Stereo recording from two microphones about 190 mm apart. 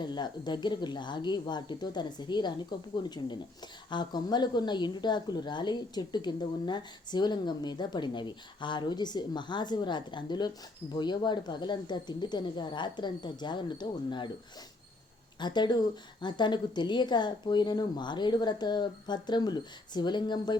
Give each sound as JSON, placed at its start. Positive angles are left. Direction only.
{"t": 0.0, "sound": "a woman's voice", "side_deg": 25}
{"t": 15.4, "sound": "a woman's voice", "side_deg": 25}